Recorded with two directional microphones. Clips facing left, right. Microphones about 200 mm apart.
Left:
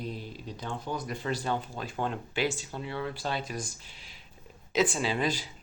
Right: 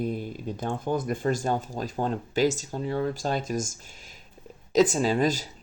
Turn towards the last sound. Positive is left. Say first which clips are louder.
# right 6 dB
turn(degrees=-45)  # may be behind; listen again after turning